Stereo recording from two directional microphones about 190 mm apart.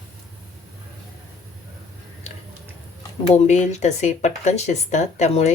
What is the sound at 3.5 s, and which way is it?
Speech, 40° left (ahead or behind).